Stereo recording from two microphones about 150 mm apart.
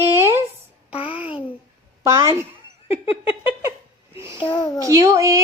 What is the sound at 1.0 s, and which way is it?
Babbling, 40° left (ahead or behind).